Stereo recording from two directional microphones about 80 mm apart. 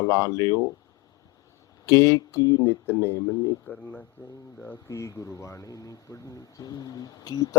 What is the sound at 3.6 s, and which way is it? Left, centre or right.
Speech, centre.